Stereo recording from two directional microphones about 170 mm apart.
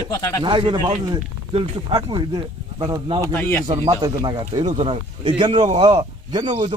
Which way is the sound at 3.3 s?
10° left (ahead or behind).